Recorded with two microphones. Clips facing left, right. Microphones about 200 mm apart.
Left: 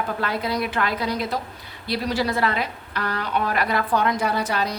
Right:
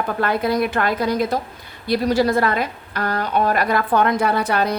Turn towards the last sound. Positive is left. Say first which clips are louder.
# right 5 dB
turn(degrees=-55)  # may be behind; listen again after turning